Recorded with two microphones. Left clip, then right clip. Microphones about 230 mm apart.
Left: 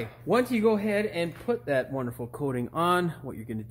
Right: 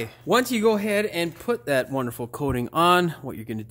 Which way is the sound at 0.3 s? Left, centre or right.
Right.